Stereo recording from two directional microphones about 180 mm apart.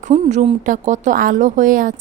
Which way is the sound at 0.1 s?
40° right (ahead or behind).